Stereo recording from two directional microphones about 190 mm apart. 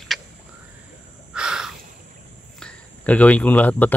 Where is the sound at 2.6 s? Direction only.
5° left (ahead or behind).